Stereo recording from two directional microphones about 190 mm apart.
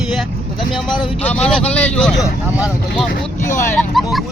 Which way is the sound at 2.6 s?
5° right (ahead or behind).